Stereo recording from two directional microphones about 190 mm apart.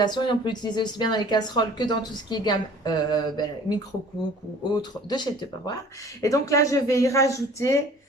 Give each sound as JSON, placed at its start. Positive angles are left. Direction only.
{"t": 0.0, "sound": "speech", "side_deg": 25}